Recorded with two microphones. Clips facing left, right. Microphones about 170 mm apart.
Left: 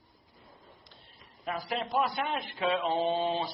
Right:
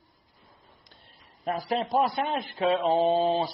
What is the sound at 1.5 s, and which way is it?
A man's voice, 40° right (ahead or behind).